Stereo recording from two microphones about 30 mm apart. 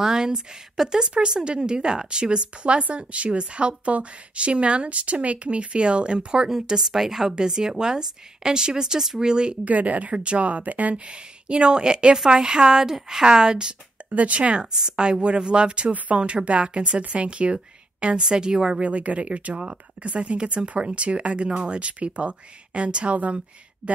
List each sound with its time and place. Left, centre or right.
0.0 s speech: centre
1.4 s speech: right
6.5 s speech: centre
7.2 s speech: right
9.7 s speech: right
10.1 s speech: right
11.4 s speech: right
12.7 s speech: centre
14.1 s speech: right
14.7 s speech: right
18.8 s speech: right
20.8 s speech: right